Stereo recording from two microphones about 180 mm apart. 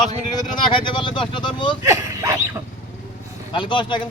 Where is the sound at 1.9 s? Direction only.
20° right (ahead or behind).